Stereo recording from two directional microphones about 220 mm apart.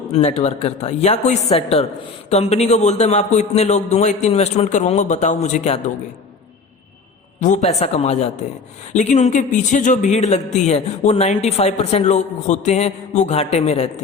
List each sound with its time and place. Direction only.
0.1 s speech: 30° left (ahead or behind)
7.4 s speech: 30° left (ahead or behind)